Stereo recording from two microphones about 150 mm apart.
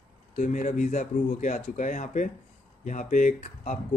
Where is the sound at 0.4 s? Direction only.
55° left (ahead or behind).